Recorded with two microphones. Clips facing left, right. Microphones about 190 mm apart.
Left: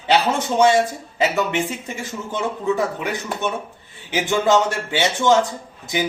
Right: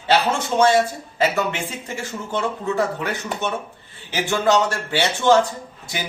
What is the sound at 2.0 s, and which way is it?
A man's voice, 15° left (ahead or behind).